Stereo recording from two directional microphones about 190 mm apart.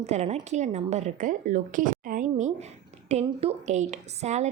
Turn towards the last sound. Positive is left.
turn(degrees=-35)  # may be behind; listen again after turning